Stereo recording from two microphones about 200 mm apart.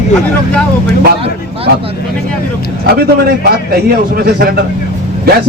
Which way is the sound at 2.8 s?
50° right (ahead or behind).